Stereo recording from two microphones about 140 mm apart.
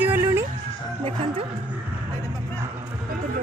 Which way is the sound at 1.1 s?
40° right (ahead or behind).